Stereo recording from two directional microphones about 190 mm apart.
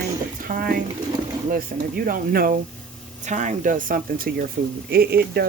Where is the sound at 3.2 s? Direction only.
40° right (ahead or behind).